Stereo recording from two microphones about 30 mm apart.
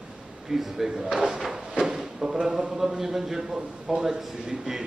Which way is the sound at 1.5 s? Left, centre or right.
Right.